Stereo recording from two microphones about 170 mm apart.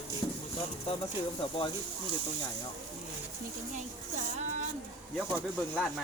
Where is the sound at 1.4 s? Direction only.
30° left (ahead or behind).